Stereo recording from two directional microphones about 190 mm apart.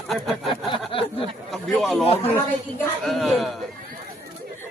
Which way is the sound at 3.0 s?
Centre (ahead or behind).